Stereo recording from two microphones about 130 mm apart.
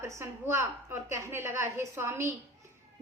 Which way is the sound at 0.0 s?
20° right (ahead or behind).